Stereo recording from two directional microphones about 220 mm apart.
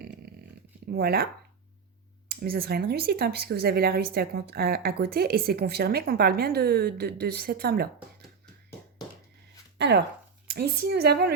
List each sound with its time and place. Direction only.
0.9 s speech: 45° right (ahead or behind)
2.3 s speech: 45° right (ahead or behind)
9.7 s speech: 50° right (ahead or behind)